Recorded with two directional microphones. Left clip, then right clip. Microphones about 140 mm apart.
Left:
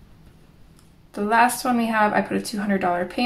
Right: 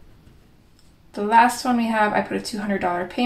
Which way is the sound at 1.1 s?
35° left (ahead or behind).